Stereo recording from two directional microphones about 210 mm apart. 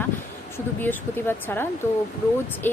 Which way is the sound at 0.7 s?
10° left (ahead or behind).